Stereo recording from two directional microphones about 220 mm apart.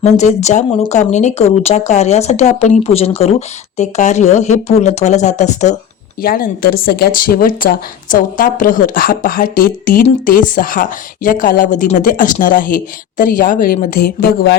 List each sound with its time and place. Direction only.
0.0 s a woman's voice: 30° left (ahead or behind)